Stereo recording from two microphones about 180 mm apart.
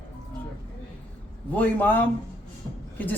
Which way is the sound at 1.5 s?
10° left (ahead or behind).